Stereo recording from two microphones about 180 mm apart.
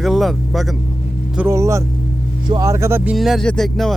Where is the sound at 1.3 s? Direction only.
15° right (ahead or behind).